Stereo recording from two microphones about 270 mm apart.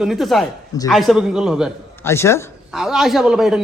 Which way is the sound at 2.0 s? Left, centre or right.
Centre.